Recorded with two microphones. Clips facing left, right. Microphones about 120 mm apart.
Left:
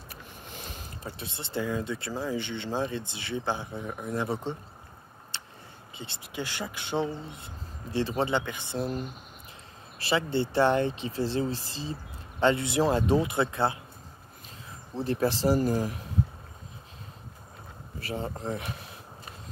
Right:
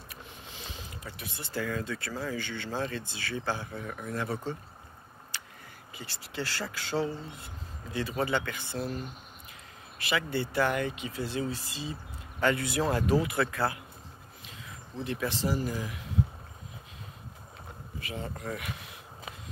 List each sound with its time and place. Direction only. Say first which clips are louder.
0.1 s a sound: left 3 dB; 45° left (ahead or behind)
1.0 s speech: left 5 dB; 25° left (ahead or behind)
5.3 s a sound: left 1 dB; 30° left (ahead or behind)
5.9 s speech: left 1 dB; 20° left (ahead or behind)
15.0 s speech: left 6 dB; 35° left (ahead or behind)
18.0 s speech: left 5 dB; 35° left (ahead or behind)